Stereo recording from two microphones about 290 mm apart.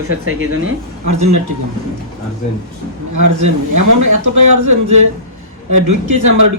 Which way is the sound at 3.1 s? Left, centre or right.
Right.